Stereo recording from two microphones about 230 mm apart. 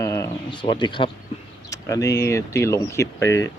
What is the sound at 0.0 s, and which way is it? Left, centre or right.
Bird, centre.